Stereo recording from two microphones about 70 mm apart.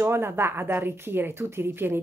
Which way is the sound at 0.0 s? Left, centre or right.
Right.